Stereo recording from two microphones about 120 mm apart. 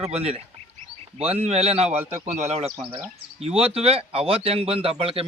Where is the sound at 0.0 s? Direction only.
60° right (ahead or behind).